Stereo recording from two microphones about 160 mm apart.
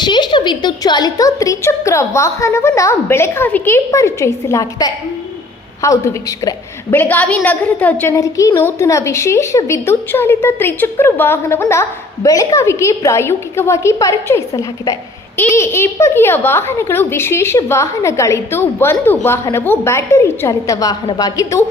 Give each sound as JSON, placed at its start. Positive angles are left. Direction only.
{"t": 0.0, "sound": "a woman's voice", "side_deg": 30}